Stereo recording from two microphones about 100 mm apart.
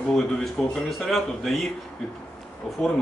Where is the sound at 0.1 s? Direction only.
5° left (ahead or behind).